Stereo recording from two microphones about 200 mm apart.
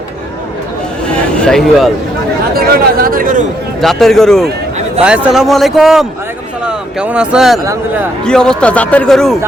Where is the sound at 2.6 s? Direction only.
50° right (ahead or behind).